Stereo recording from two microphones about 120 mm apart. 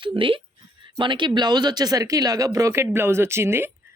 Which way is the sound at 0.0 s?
45° right (ahead or behind).